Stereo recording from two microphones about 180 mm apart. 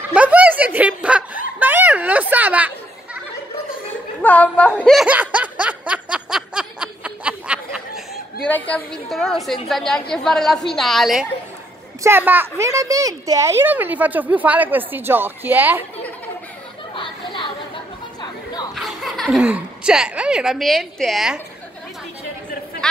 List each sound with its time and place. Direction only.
0.1 s a sound: 10° right (ahead or behind)
4.2 s snicker: 10° left (ahead or behind)
8.5 s a woman's voice: 10° left (ahead or behind)
12.0 s a woman's voice: 10° right (ahead or behind)
16.9 s chatter: 30° left (ahead or behind)
18.8 s speech: centre (ahead or behind)